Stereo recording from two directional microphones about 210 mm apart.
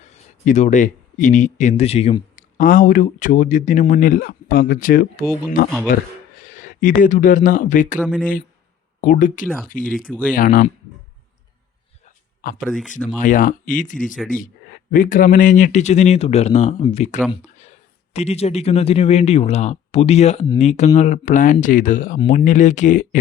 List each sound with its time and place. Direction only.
0.4 s speech: 35° left (ahead or behind)
8.0 s speech: centre (ahead or behind)
9.0 s speech: 40° left (ahead or behind)
12.5 s speech: 5° left (ahead or behind)
13.1 s speech: 40° left (ahead or behind)